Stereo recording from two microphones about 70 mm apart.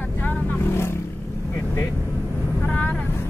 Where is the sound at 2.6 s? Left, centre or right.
Left.